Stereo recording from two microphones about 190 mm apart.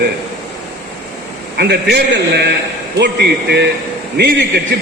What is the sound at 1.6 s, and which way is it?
A man's voice, 60° right (ahead or behind).